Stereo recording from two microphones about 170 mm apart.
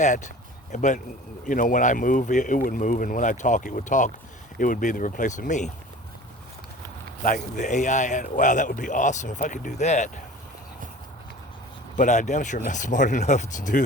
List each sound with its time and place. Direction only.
0.0 s speech: 45° left (ahead or behind)
7.2 s speech: 45° left (ahead or behind)
11.9 s speech: 45° left (ahead or behind)